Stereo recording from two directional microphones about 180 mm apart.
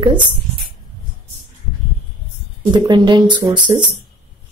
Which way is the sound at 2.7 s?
25° right (ahead or behind).